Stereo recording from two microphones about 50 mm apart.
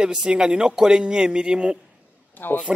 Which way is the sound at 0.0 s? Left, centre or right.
Centre.